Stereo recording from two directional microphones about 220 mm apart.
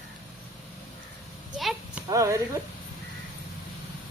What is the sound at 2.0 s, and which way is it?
Speech, 15° right (ahead or behind).